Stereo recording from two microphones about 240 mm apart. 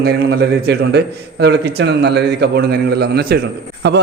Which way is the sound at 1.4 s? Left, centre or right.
Right.